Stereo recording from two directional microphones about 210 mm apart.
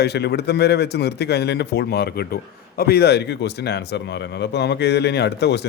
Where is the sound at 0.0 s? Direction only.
50° left (ahead or behind).